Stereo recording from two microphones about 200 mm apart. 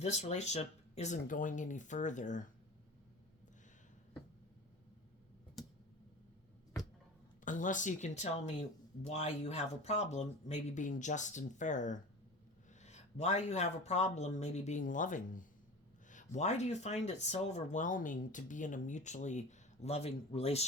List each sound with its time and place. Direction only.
0.0 s speech: 35° left (ahead or behind)
7.4 s speech: 40° left (ahead or behind)